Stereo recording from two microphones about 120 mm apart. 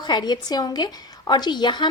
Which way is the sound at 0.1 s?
35° left (ahead or behind).